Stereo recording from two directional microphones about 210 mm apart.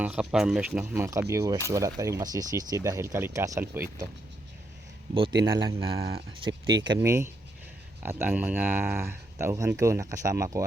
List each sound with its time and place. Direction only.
0.0 s speech: 5° right (ahead or behind)
5.1 s speech: 25° right (ahead or behind)
6.5 s speech: 60° right (ahead or behind)
6.8 s speech: 15° right (ahead or behind)